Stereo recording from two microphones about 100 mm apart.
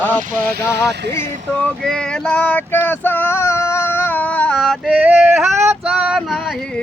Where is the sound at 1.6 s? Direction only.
5° left (ahead or behind).